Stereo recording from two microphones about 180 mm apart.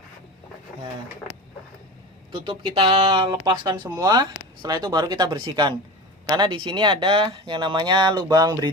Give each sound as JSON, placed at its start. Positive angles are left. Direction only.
{"t": 2.3, "sound": "speech", "side_deg": -25}